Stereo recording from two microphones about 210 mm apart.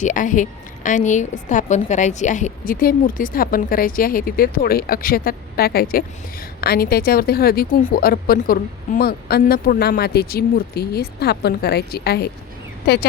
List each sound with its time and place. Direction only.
0.0 s a woman's voice: 40° left (ahead or behind)